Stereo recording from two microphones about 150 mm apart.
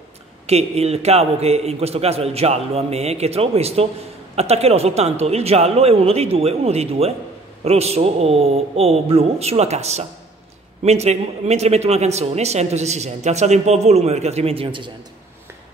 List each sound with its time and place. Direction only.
0.5 s speech: 45° right (ahead or behind)